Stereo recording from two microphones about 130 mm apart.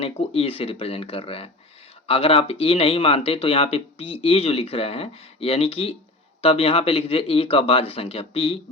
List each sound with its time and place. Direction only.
0.0 s speech: 50° left (ahead or behind)